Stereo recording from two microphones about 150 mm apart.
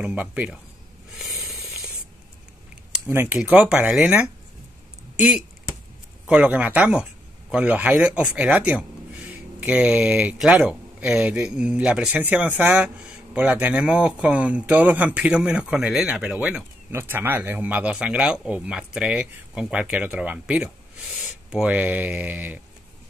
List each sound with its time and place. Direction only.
0.0 s speech: 10° right (ahead or behind)
1.1 s a sound: centre (ahead or behind)
3.1 s speech: 15° right (ahead or behind)
6.2 s speech: 10° right (ahead or behind)